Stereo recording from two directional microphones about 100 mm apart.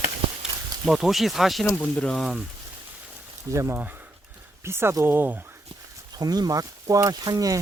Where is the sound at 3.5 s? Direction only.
30° right (ahead or behind).